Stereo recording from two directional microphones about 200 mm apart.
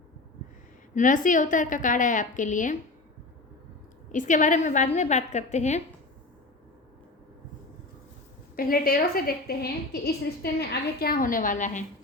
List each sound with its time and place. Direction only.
0.9 s a woman's voice: 40° left (ahead or behind)
4.1 s a woman's voice: 40° left (ahead or behind)
8.5 s a woman's voice: 45° left (ahead or behind)